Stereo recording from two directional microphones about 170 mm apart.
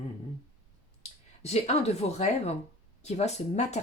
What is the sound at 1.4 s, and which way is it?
Speech, 40° left (ahead or behind).